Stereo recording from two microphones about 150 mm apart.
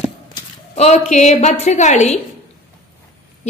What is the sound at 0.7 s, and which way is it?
A woman's voice, 45° left (ahead or behind).